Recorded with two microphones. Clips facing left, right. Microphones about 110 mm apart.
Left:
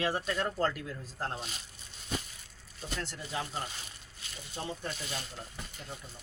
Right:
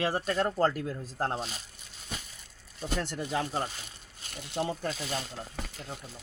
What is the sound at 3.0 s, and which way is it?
Speech, 60° right (ahead or behind).